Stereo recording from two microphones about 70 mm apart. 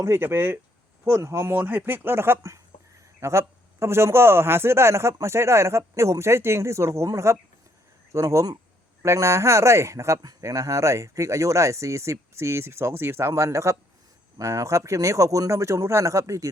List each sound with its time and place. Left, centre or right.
0.0 s a man's voice: right
1.0 s a man's voice: right
8.1 s speech: right
10.2 s speech: right